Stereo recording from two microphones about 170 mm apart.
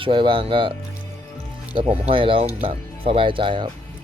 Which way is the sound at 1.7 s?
30° right (ahead or behind).